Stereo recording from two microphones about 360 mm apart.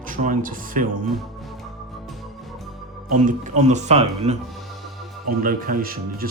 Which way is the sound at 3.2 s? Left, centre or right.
Centre.